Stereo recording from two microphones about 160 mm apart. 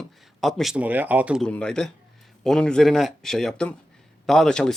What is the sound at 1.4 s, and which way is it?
A man's voice, 5° left (ahead or behind).